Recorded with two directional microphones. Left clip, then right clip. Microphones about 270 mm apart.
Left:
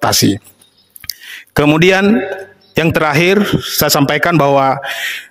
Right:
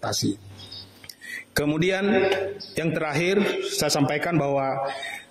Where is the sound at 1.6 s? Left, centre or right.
Left.